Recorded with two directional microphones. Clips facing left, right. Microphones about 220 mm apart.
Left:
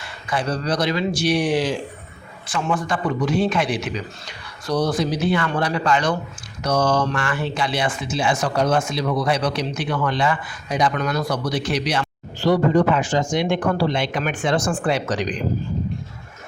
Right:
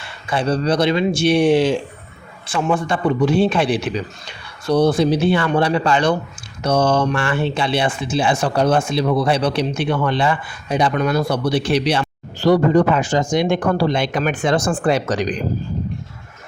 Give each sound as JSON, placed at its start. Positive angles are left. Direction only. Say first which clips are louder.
{"t": 0.0, "sound": "speech", "louder": "right 4 dB", "side_deg": -30}